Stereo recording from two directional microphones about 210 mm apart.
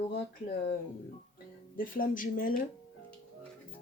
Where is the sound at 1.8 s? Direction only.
40° left (ahead or behind).